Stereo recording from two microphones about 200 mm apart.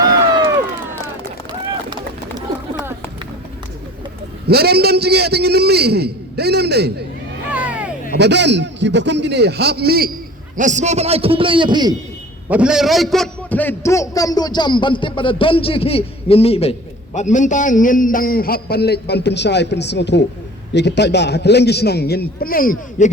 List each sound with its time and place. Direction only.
4.4 s a man's voice: 50° right (ahead or behind)
7.5 s vehicle: 5° right (ahead or behind)
8.2 s a man's voice: 60° right (ahead or behind)
10.6 s a man's voice: 35° right (ahead or behind); by 11.9 s 20° right (ahead or behind)
12.5 s a man's voice: 5° right (ahead or behind); by 23.1 s 40° left (ahead or behind)